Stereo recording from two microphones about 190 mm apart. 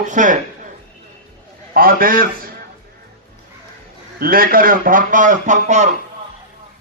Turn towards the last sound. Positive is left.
turn(degrees=-40)  # may be behind; listen again after turning